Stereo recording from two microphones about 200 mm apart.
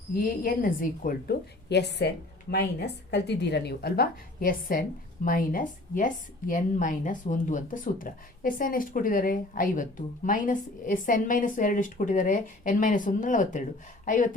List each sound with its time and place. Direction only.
0.1 s a woman's voice: 45° left (ahead or behind)